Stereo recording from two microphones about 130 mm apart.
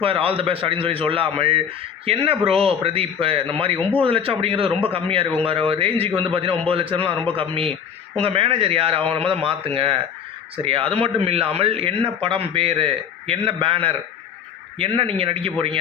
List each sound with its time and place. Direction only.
0.0 s a man's voice: 45° right (ahead or behind)